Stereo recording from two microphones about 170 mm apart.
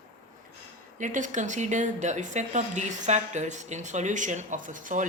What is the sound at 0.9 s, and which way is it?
A woman's voice, 50° right (ahead or behind).